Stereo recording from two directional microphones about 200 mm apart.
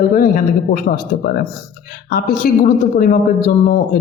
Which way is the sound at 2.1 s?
45° left (ahead or behind).